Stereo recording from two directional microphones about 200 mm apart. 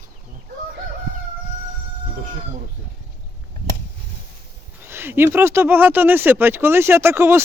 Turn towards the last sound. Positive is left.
turn(degrees=-10)  # may be behind; listen again after turning